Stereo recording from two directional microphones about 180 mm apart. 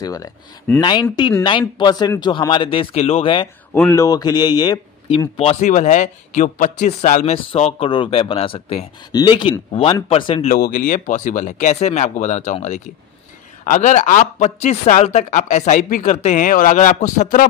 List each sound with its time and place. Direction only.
0.0 s speech: 20° left (ahead or behind)
3.7 s speech: 15° left (ahead or behind)
5.4 s a man's voice: 40° left (ahead or behind)
10.6 s a man's voice: 45° left (ahead or behind)